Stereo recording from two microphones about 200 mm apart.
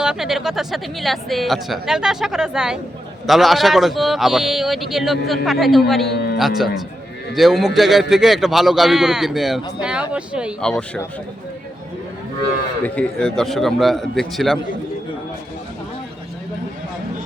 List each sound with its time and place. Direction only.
0.0 s speech: 5° right (ahead or behind)
12.8 s speech: 5° left (ahead or behind)